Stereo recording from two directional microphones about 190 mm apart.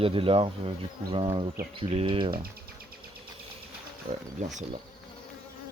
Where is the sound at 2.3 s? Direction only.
55° right (ahead or behind).